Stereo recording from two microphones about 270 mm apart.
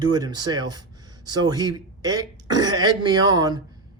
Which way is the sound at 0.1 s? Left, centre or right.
Centre.